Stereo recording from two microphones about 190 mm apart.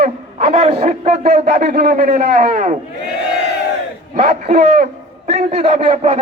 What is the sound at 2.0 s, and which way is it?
Speech, 40° right (ahead or behind).